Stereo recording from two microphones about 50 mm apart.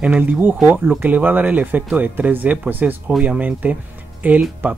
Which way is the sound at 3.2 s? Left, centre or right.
Right.